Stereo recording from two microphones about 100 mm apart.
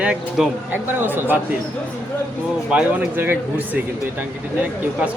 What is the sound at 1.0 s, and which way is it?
Speech, 20° right (ahead or behind).